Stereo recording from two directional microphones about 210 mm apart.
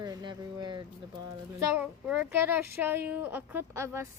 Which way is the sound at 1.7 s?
5° right (ahead or behind).